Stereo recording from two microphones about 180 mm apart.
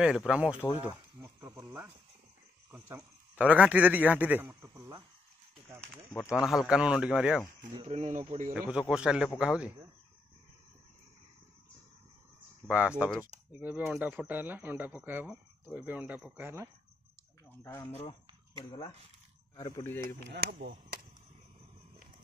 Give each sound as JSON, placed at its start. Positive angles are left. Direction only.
{"t": 0.0, "sound": "a man's voice", "side_deg": -5}
{"t": 0.7, "sound": "insect", "side_deg": -15}
{"t": 2.7, "sound": "speech", "side_deg": -10}
{"t": 5.8, "sound": "speech", "side_deg": 10}
{"t": 6.3, "sound": "a man's voice", "side_deg": -5}
{"t": 7.7, "sound": "speech", "side_deg": -35}
{"t": 8.6, "sound": "a man's voice", "side_deg": -5}
{"t": 12.6, "sound": "speech", "side_deg": -5}
{"t": 17.5, "sound": "speech", "side_deg": 10}
{"t": 18.6, "sound": "speech", "side_deg": 25}
{"t": 19.6, "sound": "speech", "side_deg": 15}
{"t": 20.2, "sound": "speech", "side_deg": -60}